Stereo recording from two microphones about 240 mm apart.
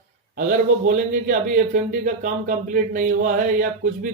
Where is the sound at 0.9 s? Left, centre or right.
Right.